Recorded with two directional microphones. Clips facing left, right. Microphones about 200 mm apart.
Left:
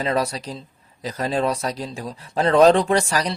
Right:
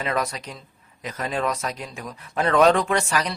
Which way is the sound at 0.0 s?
30° left (ahead or behind).